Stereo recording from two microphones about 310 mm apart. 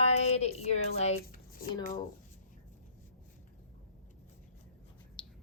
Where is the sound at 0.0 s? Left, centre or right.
Centre.